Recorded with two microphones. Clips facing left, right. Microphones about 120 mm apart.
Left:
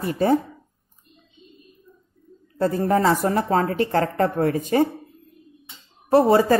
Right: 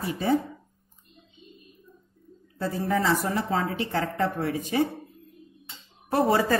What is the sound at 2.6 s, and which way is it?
A woman's voice, 50° left (ahead or behind).